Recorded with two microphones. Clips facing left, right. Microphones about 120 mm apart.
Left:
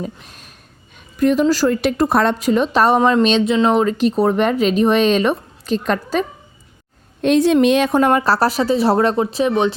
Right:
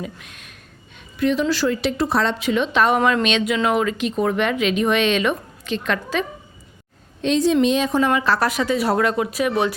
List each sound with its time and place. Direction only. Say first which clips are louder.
0.0 s a woman's voice: left 4 dB; 35° left (ahead or behind)
7.2 s speech: left 4 dB; 55° left (ahead or behind); by 9.5 s 30° left (ahead or behind)